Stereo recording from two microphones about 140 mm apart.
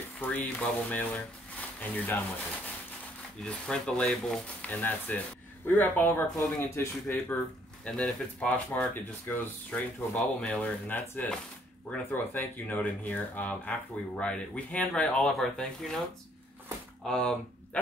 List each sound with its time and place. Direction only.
0.2 s speech: 15° left (ahead or behind)
3.4 s speech: 5° left (ahead or behind)
7.8 s speech: 5° left (ahead or behind)
17.0 s speech: 5° left (ahead or behind)